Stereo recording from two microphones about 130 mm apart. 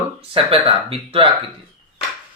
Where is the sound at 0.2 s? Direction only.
45° right (ahead or behind).